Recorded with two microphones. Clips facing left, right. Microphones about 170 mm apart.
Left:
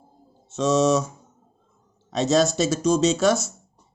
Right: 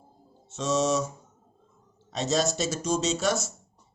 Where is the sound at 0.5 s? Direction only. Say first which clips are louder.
Left 6 dB; 90° left.